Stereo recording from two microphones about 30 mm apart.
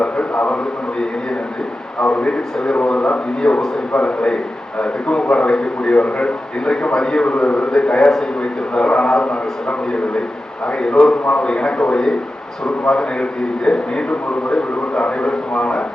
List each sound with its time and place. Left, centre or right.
0.0 s a man's voice: left
2.0 s a man's voice: left